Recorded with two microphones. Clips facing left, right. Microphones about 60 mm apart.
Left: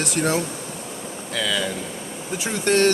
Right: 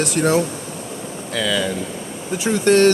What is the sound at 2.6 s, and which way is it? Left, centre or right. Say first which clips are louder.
Speech: right 5 dB; right.